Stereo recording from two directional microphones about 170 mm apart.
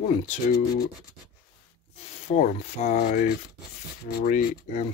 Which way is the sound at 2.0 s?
45° left (ahead or behind).